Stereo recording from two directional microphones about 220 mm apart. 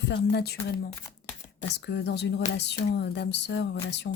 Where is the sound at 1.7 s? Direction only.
50° left (ahead or behind).